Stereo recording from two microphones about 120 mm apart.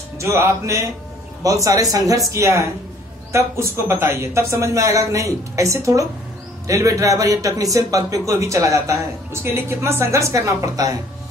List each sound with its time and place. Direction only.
0.2 s a man's voice: 20° right (ahead or behind)